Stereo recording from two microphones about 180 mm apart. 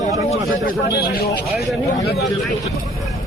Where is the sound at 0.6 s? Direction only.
60° left (ahead or behind).